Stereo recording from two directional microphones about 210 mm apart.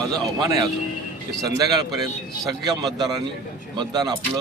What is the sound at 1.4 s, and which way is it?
A man's voice, 15° right (ahead or behind).